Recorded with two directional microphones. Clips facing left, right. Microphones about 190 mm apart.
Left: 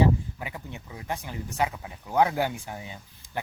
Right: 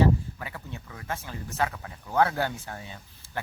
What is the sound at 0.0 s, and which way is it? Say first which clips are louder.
Speech: even; 15° left (ahead or behind).